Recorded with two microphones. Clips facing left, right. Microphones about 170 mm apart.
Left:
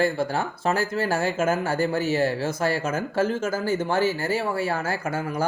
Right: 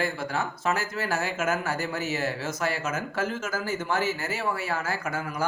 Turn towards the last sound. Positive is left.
turn(degrees=30)  # may be behind; listen again after turning